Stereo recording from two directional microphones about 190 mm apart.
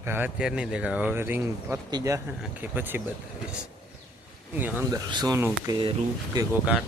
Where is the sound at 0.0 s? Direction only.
10° right (ahead or behind).